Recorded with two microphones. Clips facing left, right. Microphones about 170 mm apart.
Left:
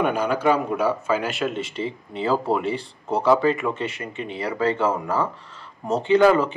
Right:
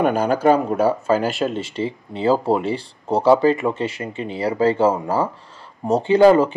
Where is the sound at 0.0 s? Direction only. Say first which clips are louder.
Right 4 dB; 40° right (ahead or behind).